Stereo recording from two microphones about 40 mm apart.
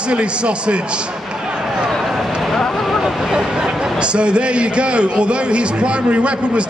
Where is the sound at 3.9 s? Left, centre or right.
Right.